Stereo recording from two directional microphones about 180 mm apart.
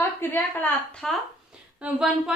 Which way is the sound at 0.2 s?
10° left (ahead or behind).